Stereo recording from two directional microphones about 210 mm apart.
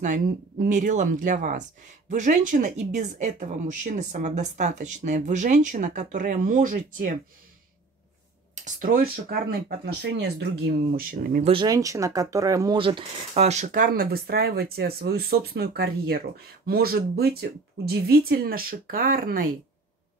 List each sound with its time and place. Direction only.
0.0 s a woman's voice: 35° right (ahead or behind)
8.5 s speech: 35° right (ahead or behind)
11.5 s speech: 20° right (ahead or behind); by 19.5 s 45° right (ahead or behind)